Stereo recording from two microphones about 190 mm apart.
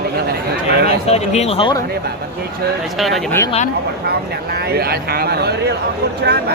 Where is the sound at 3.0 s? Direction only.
Centre (ahead or behind).